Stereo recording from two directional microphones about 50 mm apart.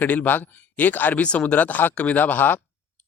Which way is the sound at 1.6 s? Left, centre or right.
Left.